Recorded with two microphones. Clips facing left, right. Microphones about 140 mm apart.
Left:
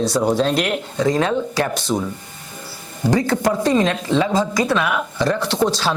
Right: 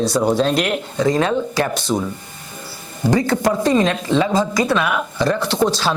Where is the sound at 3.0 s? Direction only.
10° right (ahead or behind).